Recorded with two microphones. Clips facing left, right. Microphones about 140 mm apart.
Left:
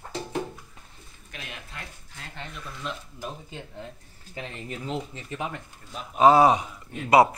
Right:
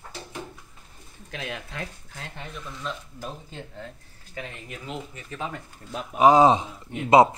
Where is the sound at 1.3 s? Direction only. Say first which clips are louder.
Right 7 dB; 90° right.